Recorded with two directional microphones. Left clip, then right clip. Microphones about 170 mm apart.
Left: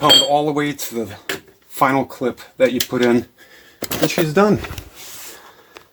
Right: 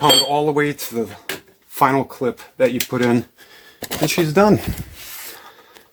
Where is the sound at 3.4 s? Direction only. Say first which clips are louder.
Even; 60° right (ahead or behind).